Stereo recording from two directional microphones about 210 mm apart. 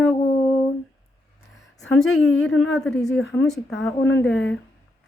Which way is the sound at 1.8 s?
Centre (ahead or behind).